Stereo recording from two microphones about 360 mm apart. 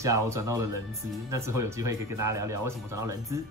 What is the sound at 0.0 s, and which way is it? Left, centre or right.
Speech, centre.